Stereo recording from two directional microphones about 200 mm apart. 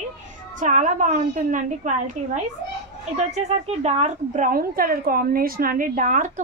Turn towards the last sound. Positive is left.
turn(degrees=-40)  # may be behind; listen again after turning